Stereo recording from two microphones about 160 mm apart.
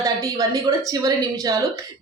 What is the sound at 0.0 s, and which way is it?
A woman's voice, 20° right (ahead or behind).